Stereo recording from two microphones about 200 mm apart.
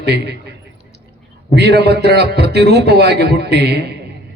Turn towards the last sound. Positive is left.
turn(degrees=-55)  # may be behind; listen again after turning